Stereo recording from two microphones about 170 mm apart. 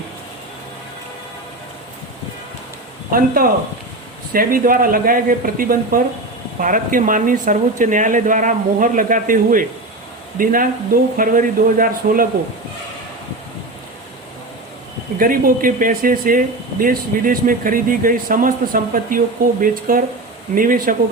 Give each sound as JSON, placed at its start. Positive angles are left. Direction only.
{"t": 3.1, "sound": "speech", "side_deg": -55}
{"t": 15.2, "sound": "speech", "side_deg": -55}